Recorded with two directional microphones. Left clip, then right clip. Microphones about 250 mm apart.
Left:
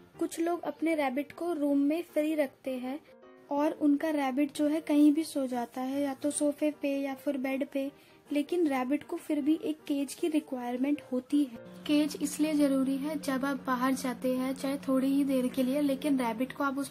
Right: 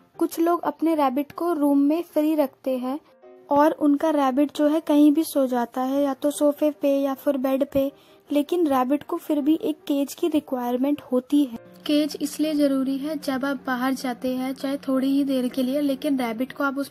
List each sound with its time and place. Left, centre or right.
0.2 s speech: right